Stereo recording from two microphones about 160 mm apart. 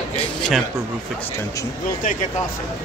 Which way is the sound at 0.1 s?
Centre (ahead or behind).